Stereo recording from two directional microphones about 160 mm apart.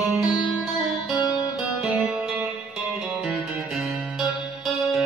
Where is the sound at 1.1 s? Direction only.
25° left (ahead or behind).